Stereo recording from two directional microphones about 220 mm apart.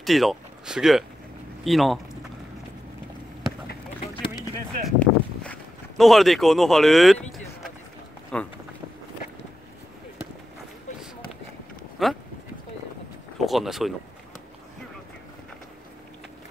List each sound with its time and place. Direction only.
0.0 s speech: centre (ahead or behind)
4.8 s a sound: 5° left (ahead or behind)
8.3 s speech: 5° left (ahead or behind)
12.0 s speech: centre (ahead or behind)
13.4 s speech: centre (ahead or behind)